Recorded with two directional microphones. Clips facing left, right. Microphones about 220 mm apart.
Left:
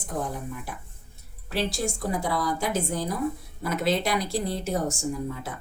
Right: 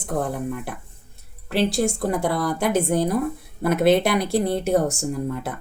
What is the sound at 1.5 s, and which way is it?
Speech, 60° right (ahead or behind).